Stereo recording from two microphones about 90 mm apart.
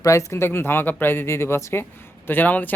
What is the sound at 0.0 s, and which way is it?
Speech, 35° left (ahead or behind).